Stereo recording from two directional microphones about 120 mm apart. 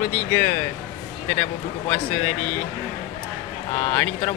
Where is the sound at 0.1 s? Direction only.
15° left (ahead or behind).